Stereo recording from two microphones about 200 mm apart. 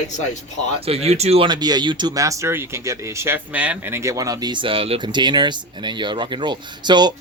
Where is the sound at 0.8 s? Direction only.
30° right (ahead or behind).